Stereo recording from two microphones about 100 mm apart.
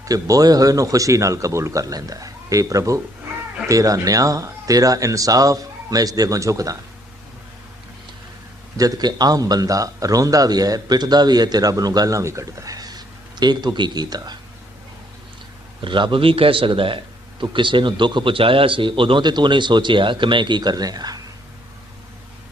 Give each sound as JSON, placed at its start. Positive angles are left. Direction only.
{"t": 0.0, "sound": "speech", "side_deg": -35}
{"t": 8.8, "sound": "speech", "side_deg": -45}
{"t": 15.8, "sound": "a man's voice", "side_deg": -55}